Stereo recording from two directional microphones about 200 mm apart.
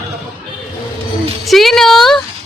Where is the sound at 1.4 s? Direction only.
Centre (ahead or behind).